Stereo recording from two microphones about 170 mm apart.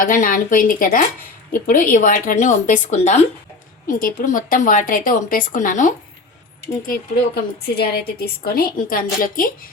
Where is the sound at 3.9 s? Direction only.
55° left (ahead or behind).